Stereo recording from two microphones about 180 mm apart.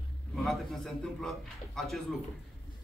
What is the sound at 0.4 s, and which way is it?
A man's voice, centre (ahead or behind).